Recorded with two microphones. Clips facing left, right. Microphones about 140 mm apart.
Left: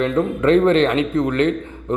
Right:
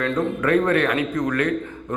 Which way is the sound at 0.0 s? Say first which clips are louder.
Left 4 dB; 25° left (ahead or behind).